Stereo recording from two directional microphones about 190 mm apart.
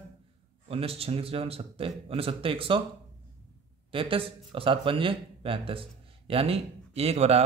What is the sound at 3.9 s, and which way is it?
A man's voice, 30° right (ahead or behind).